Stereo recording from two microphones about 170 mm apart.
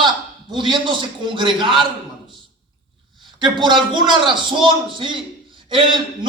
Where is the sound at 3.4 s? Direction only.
25° right (ahead or behind).